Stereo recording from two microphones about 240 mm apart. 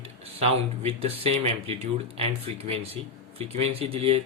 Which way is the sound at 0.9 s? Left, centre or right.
Right.